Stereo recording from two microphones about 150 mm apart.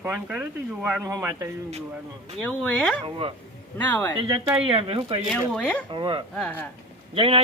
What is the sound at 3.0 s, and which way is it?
Speech, 35° right (ahead or behind).